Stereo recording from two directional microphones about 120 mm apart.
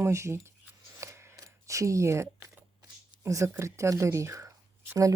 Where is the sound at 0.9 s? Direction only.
20° right (ahead or behind).